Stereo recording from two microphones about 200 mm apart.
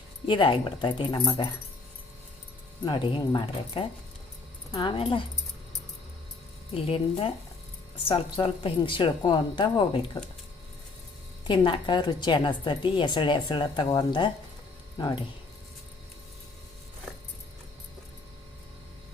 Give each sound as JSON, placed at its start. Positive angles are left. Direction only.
{"t": 0.3, "sound": "a woman's voice", "side_deg": 25}
{"t": 2.8, "sound": "a woman's voice", "side_deg": 25}
{"t": 6.7, "sound": "a woman's voice", "side_deg": 30}
{"t": 11.4, "sound": "a woman's voice", "side_deg": 25}
{"t": 17.1, "sound": "a sound", "side_deg": 5}